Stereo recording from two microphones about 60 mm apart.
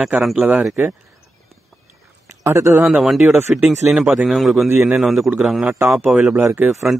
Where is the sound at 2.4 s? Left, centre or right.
Right.